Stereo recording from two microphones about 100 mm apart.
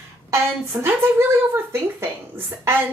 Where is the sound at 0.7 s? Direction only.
20° right (ahead or behind).